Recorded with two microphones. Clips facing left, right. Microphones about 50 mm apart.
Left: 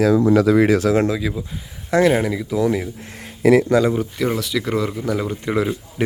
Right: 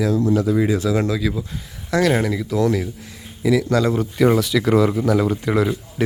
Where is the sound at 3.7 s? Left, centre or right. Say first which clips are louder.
Left 2 dB; centre.